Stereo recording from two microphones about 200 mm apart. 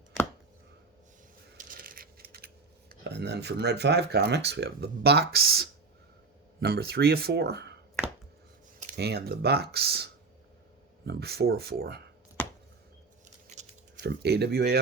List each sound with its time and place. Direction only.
1.5 s coin: 45° right (ahead or behind)
2.9 s speech: 55° right (ahead or behind)
8.8 s speech: 50° right (ahead or behind)
13.5 s a sound: 35° right (ahead or behind)
14.0 s speech: 55° right (ahead or behind)